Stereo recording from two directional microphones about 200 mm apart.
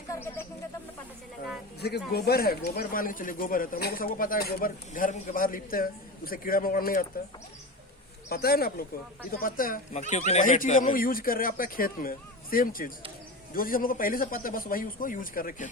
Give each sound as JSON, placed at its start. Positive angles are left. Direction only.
{"t": 0.1, "sound": "bird", "side_deg": 10}
{"t": 1.8, "sound": "speech", "side_deg": 55}
{"t": 8.3, "sound": "speech", "side_deg": 50}